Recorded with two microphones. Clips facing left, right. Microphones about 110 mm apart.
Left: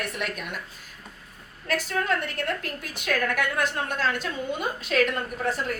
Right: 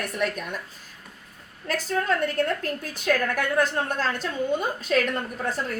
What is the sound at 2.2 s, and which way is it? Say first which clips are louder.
A woman's voice: right 5 dB; 40° right (ahead or behind).